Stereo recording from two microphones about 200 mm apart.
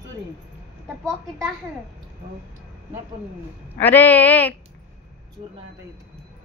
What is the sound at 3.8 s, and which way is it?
Speech, 10° left (ahead or behind).